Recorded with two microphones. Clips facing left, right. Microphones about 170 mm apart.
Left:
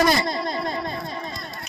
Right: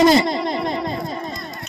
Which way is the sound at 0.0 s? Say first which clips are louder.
Right 6 dB; 25° right (ahead or behind).